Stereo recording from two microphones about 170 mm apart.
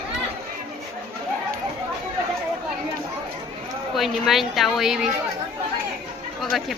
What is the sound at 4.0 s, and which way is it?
Speech, centre (ahead or behind).